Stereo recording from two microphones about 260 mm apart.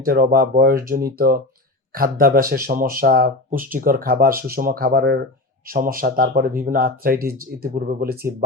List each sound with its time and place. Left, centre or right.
0.0 s speech: right